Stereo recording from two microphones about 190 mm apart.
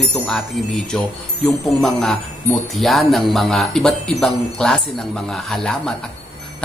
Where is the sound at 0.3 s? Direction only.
5° left (ahead or behind).